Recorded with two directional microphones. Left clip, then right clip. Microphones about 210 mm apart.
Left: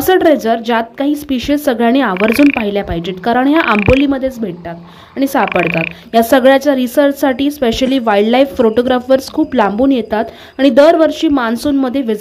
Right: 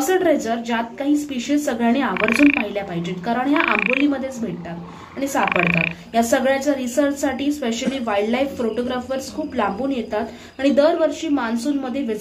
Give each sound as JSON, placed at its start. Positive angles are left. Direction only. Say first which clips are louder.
{"t": 0.0, "sound": "a woman's voice", "louder": "left 8 dB", "side_deg": 50}
{"t": 5.2, "sound": "a woman's voice", "louder": "left 6 dB", "side_deg": 50}